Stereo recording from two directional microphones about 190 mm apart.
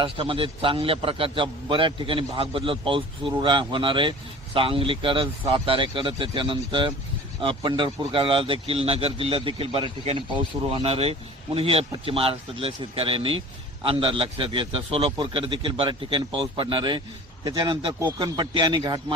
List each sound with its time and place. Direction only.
0.0 s a man's voice: 30° right (ahead or behind)